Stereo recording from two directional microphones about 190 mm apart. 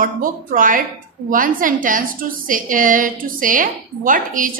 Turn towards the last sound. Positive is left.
turn(degrees=-45)  # may be behind; listen again after turning